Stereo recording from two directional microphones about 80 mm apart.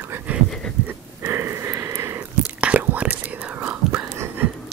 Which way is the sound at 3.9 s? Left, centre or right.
Right.